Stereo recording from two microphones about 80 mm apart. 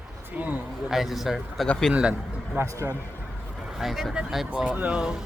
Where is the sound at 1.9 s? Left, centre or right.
Centre.